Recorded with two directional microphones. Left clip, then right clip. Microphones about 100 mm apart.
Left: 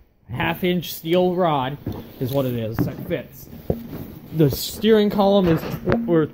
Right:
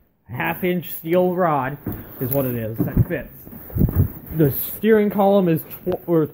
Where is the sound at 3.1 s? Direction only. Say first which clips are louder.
Left 4 dB; 20° left (ahead or behind).